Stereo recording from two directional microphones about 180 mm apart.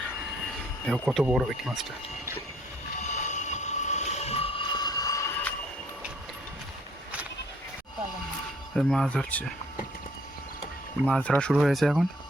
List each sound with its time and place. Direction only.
0.9 s speech: 5° left (ahead or behind)
3.0 s train: 40° left (ahead or behind); by 5.2 s 20° left (ahead or behind)
8.7 s speech: centre (ahead or behind)
11.0 s speech: 5° left (ahead or behind)